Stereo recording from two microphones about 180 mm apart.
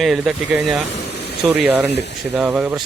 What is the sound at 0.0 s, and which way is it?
Speech, centre (ahead or behind).